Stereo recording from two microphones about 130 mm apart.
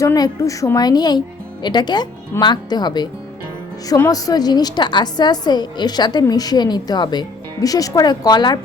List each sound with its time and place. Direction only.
0.0 s a woman's voice: 25° left (ahead or behind)